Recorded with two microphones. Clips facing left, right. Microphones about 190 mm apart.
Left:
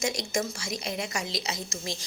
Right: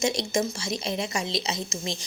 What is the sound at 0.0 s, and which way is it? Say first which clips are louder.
A woman's voice: right 4 dB; 25° right (ahead or behind).